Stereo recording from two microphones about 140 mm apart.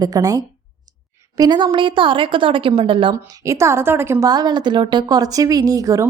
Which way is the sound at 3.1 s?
20° right (ahead or behind).